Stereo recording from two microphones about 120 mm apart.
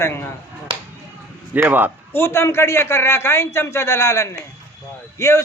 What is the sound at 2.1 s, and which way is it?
A man's voice, 20° left (ahead or behind).